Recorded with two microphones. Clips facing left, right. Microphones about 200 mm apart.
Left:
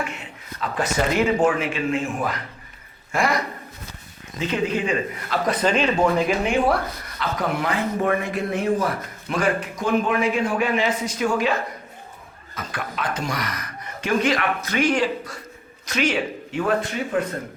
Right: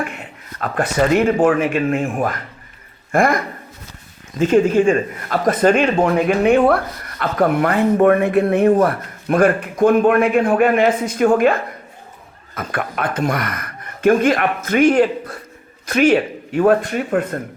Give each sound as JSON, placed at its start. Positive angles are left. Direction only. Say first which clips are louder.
{"t": 0.6, "sound": "a man's voice", "louder": "right 5 dB", "side_deg": -55}